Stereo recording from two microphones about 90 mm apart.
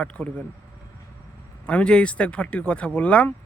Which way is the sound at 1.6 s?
15° left (ahead or behind).